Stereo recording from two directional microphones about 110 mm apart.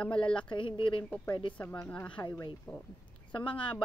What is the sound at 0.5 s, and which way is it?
Speech, 50° left (ahead or behind).